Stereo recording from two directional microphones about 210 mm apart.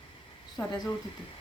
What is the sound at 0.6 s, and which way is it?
Speech, 20° left (ahead or behind).